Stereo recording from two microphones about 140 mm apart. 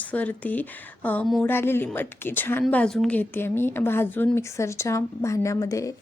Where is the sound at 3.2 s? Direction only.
15° left (ahead or behind).